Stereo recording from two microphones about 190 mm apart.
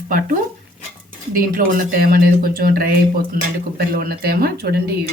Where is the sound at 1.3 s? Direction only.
50° right (ahead or behind).